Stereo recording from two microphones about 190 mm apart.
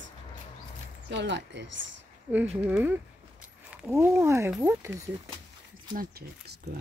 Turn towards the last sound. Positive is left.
turn(degrees=-60)  # may be behind; listen again after turning